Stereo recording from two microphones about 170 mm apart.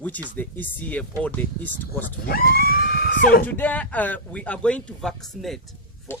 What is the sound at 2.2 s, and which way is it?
Speech, 60° left (ahead or behind).